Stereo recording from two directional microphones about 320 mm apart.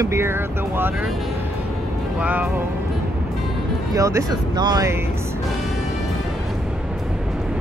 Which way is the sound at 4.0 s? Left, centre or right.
Centre.